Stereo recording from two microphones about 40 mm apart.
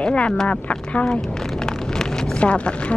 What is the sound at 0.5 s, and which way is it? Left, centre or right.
Speech, left.